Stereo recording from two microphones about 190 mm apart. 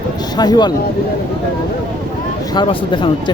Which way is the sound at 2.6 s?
25° left (ahead or behind).